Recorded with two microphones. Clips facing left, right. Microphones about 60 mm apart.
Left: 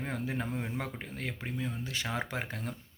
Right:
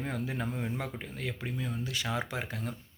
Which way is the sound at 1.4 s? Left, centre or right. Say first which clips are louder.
Right 1 dB; left.